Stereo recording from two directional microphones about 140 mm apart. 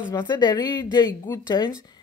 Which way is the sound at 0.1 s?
30° left (ahead or behind).